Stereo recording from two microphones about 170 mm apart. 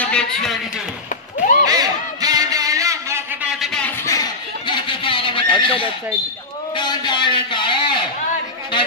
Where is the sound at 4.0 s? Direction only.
20° left (ahead or behind).